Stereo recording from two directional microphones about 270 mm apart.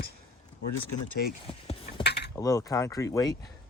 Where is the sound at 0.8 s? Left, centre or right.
Left.